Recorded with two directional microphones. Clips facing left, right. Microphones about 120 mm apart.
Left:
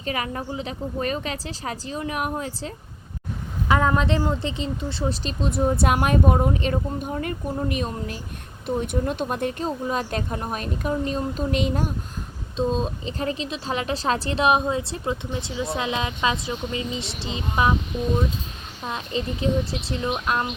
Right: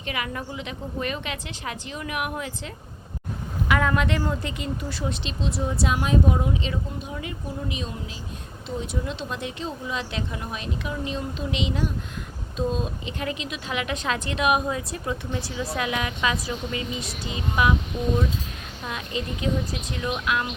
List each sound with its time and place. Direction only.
0.0 s a woman's voice: 35° left (ahead or behind)
5.2 s speech: 50° left (ahead or behind)
12.5 s a woman's voice: 30° left (ahead or behind)
18.9 s a woman's voice: 30° left (ahead or behind)